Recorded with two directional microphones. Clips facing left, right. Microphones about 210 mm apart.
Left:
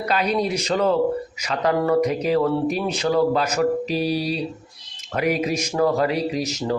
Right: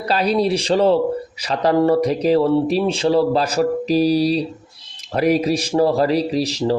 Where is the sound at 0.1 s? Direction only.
35° right (ahead or behind).